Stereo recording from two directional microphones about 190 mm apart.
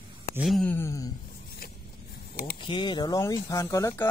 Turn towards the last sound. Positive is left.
turn(degrees=15)  # may be behind; listen again after turning